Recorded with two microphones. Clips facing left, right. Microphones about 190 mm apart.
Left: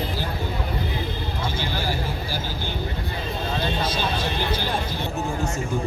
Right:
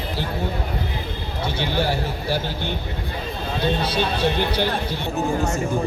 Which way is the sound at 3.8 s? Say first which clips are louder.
Right 4 dB; 65° right (ahead or behind).